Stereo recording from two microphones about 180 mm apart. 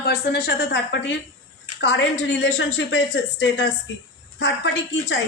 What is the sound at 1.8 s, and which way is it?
A woman's voice, 90° left.